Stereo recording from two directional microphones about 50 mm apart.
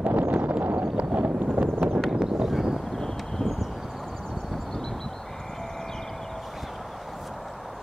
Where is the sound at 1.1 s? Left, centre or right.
Right.